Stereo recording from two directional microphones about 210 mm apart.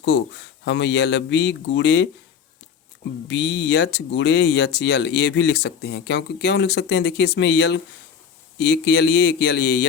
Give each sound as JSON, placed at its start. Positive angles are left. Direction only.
{"t": 0.1, "sound": "speech", "side_deg": 55}
{"t": 3.2, "sound": "speech", "side_deg": 55}